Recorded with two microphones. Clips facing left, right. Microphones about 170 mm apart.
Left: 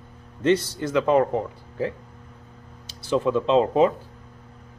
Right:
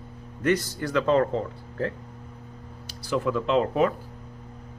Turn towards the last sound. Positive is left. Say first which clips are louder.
# left 4 dB
turn(degrees=25)  # may be behind; listen again after turning